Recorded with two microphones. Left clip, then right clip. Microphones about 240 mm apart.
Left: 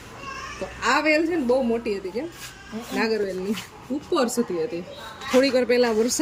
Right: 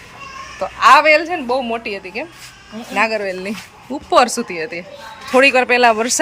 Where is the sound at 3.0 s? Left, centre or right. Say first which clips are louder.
Right 7 dB; centre.